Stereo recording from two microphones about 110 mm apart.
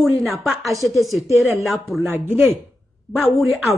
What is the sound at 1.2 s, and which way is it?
Speech, 25° right (ahead or behind).